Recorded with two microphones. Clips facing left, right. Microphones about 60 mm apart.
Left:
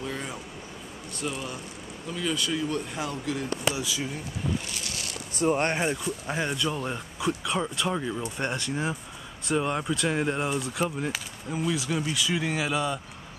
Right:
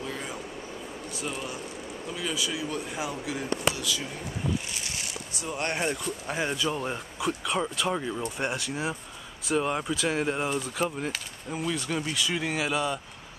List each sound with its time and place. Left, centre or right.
0.0 s vehicle: centre
1.1 s speech: centre
3.7 s speech: centre
5.4 s speech: left
5.7 s speech: centre
6.3 s speech: centre